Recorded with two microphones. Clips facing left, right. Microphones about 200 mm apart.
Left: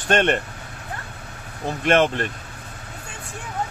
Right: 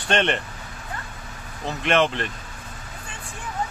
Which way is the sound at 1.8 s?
50° left (ahead or behind).